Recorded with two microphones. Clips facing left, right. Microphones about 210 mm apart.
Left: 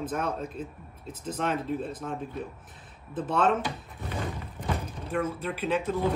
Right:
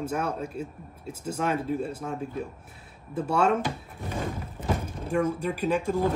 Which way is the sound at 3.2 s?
10° right (ahead or behind).